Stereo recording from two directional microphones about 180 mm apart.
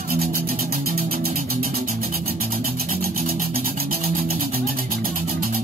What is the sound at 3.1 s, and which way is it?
Music, 55° right (ahead or behind).